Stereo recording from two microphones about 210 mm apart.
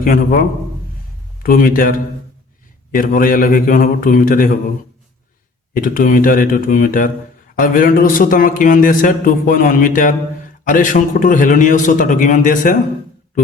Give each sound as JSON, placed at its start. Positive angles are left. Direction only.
{"t": 0.0, "sound": "speech", "side_deg": 40}
{"t": 5.7, "sound": "speech", "side_deg": 40}